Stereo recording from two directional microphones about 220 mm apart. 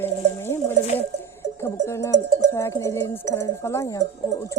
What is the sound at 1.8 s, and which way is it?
Speech, 15° left (ahead or behind).